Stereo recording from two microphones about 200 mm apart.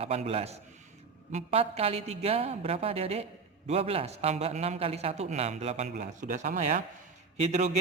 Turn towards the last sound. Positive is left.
turn(degrees=-35)  # may be behind; listen again after turning